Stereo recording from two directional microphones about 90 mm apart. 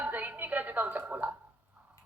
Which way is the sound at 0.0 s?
20° right (ahead or behind).